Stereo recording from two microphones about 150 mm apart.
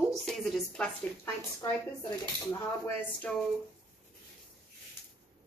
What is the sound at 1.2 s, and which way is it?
Speech, 15° left (ahead or behind).